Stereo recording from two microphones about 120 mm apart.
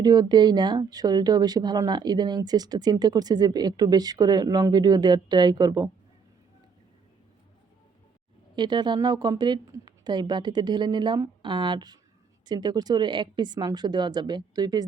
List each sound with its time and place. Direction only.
0.0 s speech: 35° right (ahead or behind)
8.5 s speech: 40° right (ahead or behind)